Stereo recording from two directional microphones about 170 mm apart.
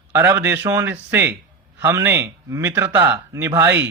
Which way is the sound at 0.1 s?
15° right (ahead or behind).